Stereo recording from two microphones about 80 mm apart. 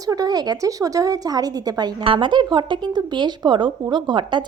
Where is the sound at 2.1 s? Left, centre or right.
Right.